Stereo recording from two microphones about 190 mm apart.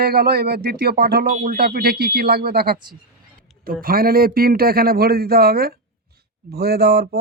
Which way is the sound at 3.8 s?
50° right (ahead or behind).